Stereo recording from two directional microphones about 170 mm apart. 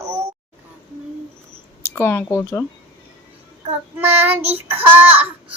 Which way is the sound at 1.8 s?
15° left (ahead or behind).